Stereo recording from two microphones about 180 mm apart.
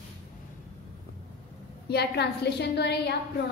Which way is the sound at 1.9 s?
65° left (ahead or behind).